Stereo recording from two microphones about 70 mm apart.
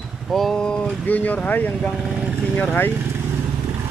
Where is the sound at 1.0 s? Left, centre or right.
Left.